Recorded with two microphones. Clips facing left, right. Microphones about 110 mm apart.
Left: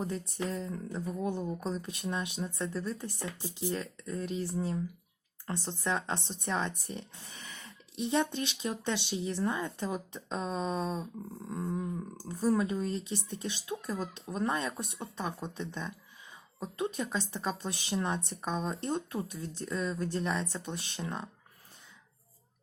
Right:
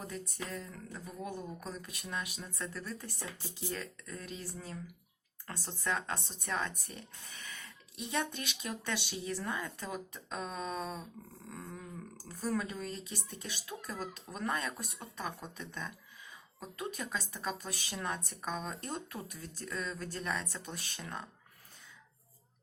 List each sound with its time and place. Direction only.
0.0 s speech: 30° left (ahead or behind)